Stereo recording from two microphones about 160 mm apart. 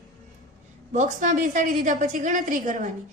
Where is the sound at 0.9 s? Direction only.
50° right (ahead or behind).